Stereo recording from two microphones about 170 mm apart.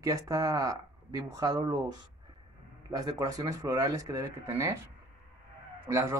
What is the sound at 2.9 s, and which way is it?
Speech, 20° right (ahead or behind).